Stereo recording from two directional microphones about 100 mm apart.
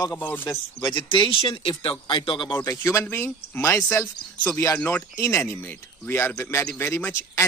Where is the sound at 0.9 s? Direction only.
55° left (ahead or behind).